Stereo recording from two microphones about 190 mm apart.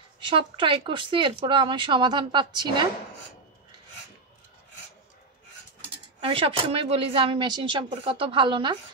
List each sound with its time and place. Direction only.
0.2 s speech: 25° right (ahead or behind)
6.2 s speech: 30° right (ahead or behind)